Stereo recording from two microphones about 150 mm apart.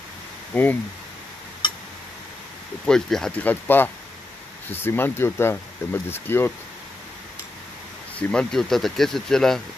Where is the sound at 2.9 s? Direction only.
5° left (ahead or behind).